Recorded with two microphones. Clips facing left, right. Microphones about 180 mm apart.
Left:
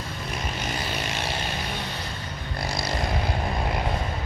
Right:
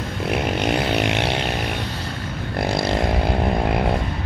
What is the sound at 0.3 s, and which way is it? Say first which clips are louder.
Vehicle: right 12 dB; 65° right (ahead or behind).